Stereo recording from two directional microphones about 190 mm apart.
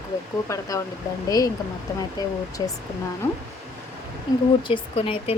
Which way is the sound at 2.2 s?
20° left (ahead or behind).